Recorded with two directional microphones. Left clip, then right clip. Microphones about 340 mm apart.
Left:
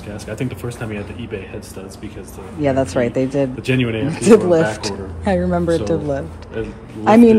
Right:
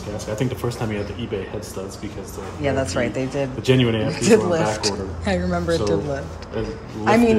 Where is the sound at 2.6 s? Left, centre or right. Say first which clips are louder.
Left 5 dB; centre.